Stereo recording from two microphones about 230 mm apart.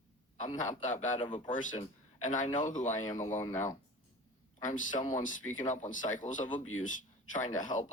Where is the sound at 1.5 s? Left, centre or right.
Left.